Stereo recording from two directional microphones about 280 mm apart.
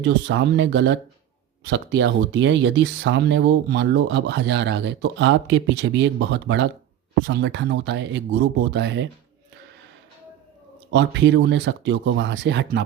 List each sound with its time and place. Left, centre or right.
0.0 s speech: right
10.9 s speech: right